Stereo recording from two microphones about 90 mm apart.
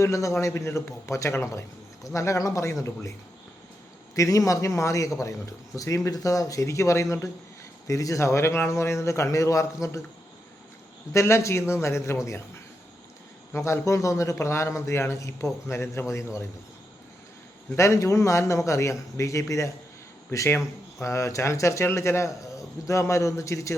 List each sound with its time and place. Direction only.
0.0 s a man's voice: 35° left (ahead or behind)
11.1 s a man's voice: 30° left (ahead or behind)
13.5 s a man's voice: 35° left (ahead or behind)
17.7 s a man's voice: 35° left (ahead or behind)